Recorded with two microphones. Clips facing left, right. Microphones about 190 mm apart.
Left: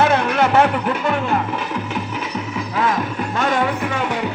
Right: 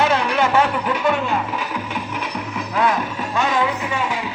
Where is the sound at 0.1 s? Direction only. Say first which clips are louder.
Left 2 dB; 55° left (ahead or behind).